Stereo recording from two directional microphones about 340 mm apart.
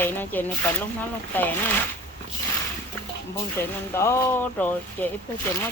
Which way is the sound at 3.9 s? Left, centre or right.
Centre.